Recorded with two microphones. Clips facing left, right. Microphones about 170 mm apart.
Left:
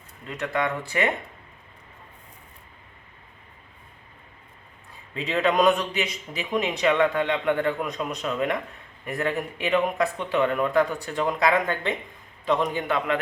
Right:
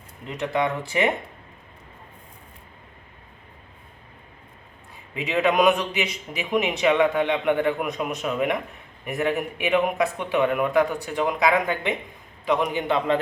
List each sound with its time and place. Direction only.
0.3 s a man's voice: 15° right (ahead or behind)
5.1 s a man's voice: 10° right (ahead or behind)